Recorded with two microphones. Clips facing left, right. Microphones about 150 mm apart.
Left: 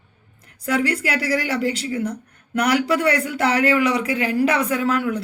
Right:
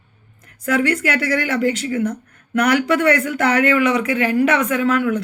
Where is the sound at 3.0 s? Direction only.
30° left (ahead or behind).